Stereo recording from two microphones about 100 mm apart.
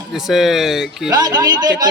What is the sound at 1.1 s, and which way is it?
Speech, 40° right (ahead or behind).